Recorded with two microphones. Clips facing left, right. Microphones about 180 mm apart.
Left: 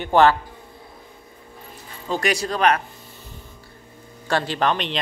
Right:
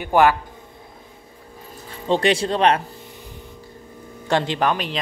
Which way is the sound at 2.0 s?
30° right (ahead or behind).